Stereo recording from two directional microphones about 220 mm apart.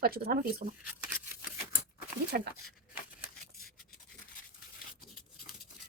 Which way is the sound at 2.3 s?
45° right (ahead or behind).